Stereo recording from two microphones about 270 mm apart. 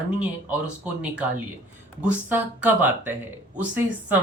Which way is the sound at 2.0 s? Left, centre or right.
Centre.